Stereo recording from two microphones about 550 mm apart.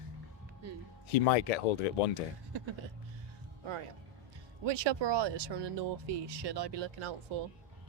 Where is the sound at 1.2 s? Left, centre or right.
Left.